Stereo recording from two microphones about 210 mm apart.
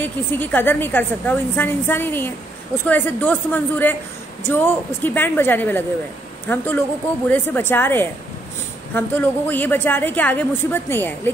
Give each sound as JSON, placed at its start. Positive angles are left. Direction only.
{"t": 0.0, "sound": "a woman's voice", "side_deg": 10}